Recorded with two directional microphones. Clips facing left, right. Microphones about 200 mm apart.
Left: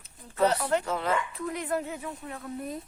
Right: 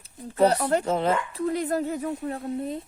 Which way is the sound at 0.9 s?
25° right (ahead or behind).